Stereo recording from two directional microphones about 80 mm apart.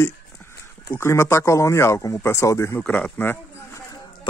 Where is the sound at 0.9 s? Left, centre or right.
Left.